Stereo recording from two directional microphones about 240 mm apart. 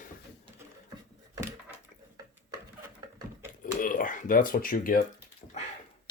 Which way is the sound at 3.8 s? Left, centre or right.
Left.